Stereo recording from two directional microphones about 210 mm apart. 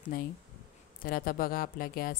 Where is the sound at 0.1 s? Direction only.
45° left (ahead or behind).